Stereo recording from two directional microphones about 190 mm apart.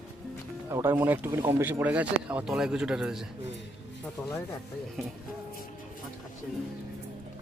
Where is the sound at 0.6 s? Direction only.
15° right (ahead or behind).